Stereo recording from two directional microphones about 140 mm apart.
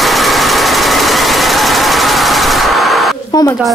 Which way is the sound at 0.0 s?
Centre (ahead or behind).